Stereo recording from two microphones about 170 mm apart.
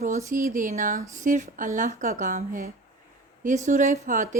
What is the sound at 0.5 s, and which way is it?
Speech, 50° right (ahead or behind).